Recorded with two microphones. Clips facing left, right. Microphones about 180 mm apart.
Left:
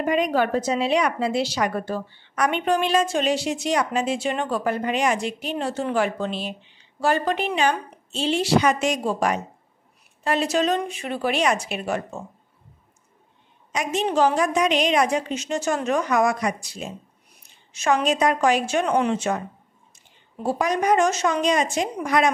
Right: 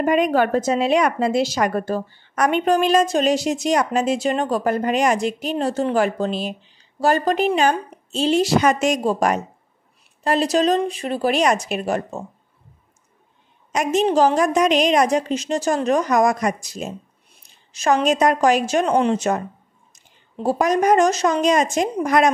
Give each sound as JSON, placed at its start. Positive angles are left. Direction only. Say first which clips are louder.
{"t": 0.0, "sound": "a woman's voice", "louder": "right 4 dB", "side_deg": -50}
{"t": 10.2, "sound": "a woman's voice", "louder": "right 4 dB", "side_deg": -35}
{"t": 13.7, "sound": "a woman's voice", "louder": "right 6 dB", "side_deg": -45}
{"t": 20.4, "sound": "a woman's voice", "louder": "right 4 dB", "side_deg": -45}